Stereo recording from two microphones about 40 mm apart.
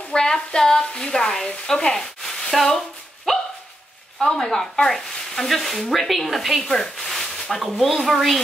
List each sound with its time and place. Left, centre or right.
0.1 s a sound: centre
1.7 s speech: centre
3.3 s dog: centre
4.2 s speech: centre